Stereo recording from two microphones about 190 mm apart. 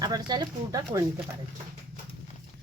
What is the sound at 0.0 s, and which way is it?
Speech, 20° right (ahead or behind).